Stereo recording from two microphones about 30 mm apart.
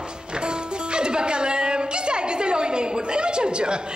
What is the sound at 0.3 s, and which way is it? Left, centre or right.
Speech, right.